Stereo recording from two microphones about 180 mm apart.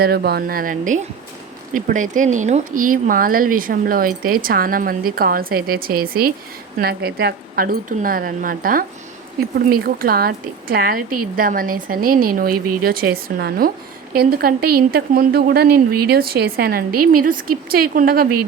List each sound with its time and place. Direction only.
0.0 s speech: 60° right (ahead or behind)